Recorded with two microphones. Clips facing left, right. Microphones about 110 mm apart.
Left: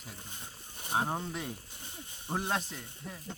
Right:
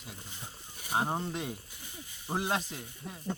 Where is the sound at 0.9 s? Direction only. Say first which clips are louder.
Right 1 dB; 5° right (ahead or behind).